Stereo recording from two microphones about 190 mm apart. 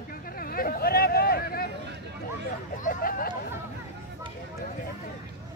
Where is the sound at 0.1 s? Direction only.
50° left (ahead or behind).